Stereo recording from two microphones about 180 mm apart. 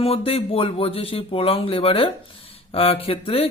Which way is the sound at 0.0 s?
30° left (ahead or behind).